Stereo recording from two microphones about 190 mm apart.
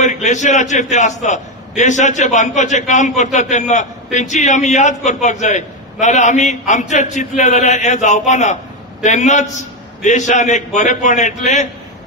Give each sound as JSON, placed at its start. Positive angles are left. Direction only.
{"t": 0.0, "sound": "a man's voice", "side_deg": 40}